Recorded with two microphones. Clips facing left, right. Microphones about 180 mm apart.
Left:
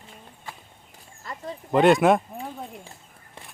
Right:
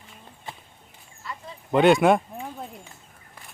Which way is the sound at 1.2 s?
45° left (ahead or behind).